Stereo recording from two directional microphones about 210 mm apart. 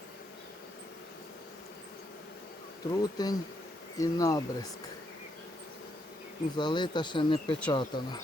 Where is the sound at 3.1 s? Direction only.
20° left (ahead or behind).